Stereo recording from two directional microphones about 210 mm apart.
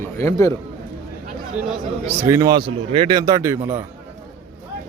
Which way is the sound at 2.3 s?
20° right (ahead or behind).